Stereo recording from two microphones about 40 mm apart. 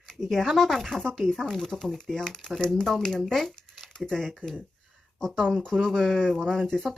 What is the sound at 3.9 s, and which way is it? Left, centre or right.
Speech, left.